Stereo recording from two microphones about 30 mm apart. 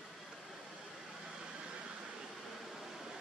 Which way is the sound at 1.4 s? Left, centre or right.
Right.